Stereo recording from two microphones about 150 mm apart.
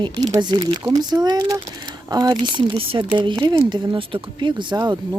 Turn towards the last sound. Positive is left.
turn(degrees=-25)  # may be behind; listen again after turning